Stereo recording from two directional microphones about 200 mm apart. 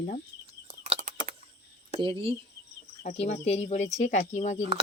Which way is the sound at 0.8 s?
40° right (ahead or behind).